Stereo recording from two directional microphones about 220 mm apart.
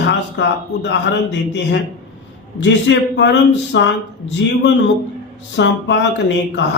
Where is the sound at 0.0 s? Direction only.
50° left (ahead or behind).